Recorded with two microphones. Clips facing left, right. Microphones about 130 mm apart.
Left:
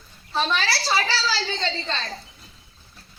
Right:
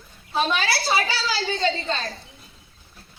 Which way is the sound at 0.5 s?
55° right (ahead or behind).